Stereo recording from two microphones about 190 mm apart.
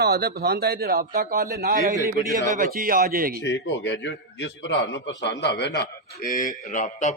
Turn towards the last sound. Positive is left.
turn(degrees=40)  # may be behind; listen again after turning